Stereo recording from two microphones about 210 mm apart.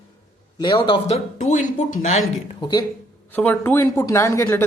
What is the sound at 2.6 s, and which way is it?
Speech, 20° left (ahead or behind).